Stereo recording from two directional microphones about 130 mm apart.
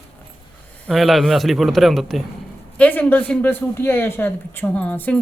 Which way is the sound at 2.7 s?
10° left (ahead or behind).